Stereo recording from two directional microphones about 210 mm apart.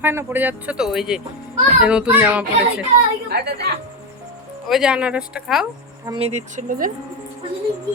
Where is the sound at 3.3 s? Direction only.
50° right (ahead or behind).